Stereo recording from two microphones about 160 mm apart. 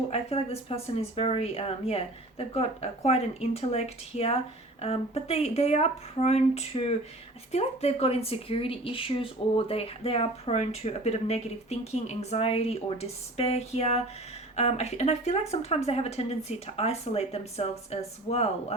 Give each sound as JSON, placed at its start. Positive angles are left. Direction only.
{"t": 0.1, "sound": "speech", "side_deg": 40}